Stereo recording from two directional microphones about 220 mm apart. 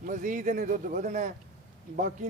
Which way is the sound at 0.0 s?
35° right (ahead or behind).